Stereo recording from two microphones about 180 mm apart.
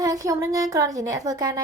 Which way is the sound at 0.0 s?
20° right (ahead or behind).